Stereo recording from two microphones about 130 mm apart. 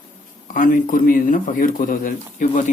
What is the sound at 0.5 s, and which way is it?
Speech, 90° left.